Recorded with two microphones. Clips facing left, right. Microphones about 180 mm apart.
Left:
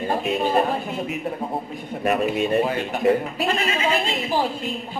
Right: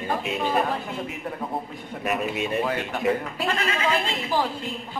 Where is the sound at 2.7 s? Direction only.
25° left (ahead or behind).